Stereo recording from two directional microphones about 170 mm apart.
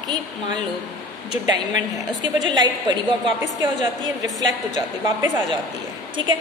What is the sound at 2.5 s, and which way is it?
A woman's voice, 25° right (ahead or behind).